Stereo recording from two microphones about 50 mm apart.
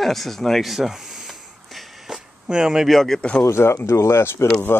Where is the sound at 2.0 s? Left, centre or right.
Centre.